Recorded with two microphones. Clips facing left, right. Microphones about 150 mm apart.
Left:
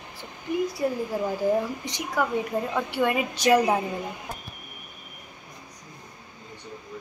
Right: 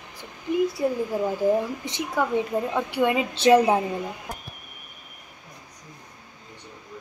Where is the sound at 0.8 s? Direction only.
20° right (ahead or behind).